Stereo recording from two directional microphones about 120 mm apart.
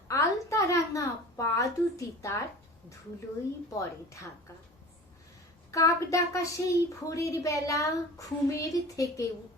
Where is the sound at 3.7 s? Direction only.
25° left (ahead or behind).